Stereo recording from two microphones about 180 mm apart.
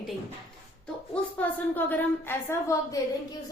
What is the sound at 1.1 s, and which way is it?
A woman's voice, 10° left (ahead or behind).